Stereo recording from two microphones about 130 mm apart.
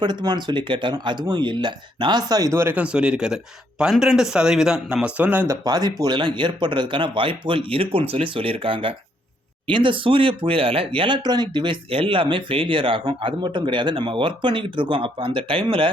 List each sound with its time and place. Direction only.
0.0 s speech: 35° right (ahead or behind); by 5.5 s 15° right (ahead or behind)
5.6 s speech: 30° right (ahead or behind)